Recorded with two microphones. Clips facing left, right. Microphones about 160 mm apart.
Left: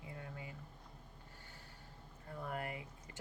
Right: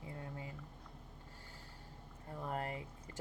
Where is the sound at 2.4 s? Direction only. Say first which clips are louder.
Right 2 dB; 30° right (ahead or behind).